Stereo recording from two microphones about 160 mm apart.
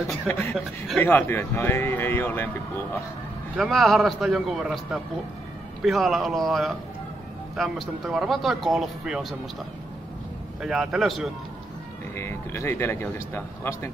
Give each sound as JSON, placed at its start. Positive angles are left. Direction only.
{"t": 0.0, "sound": "speech", "side_deg": 0}
{"t": 1.0, "sound": "speech", "side_deg": 15}
{"t": 3.5, "sound": "speech", "side_deg": 0}
{"t": 10.6, "sound": "speech", "side_deg": -5}
{"t": 12.2, "sound": "speech", "side_deg": 15}